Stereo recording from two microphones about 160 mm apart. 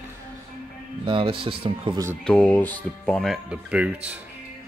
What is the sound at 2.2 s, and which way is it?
Speech, 5° left (ahead or behind).